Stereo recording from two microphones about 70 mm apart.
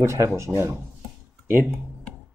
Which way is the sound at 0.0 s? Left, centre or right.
Right.